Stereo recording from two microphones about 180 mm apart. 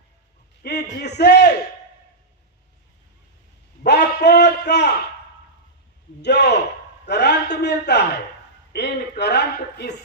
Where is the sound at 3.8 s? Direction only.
65° left (ahead or behind).